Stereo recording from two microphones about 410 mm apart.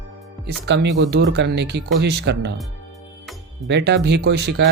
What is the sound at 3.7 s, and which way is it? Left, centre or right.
Speech, right.